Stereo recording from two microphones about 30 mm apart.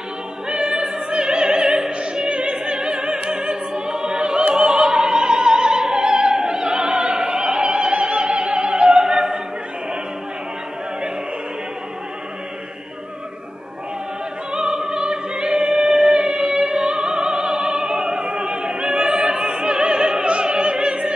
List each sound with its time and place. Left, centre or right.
0.5 s opera: right
14.5 s music: right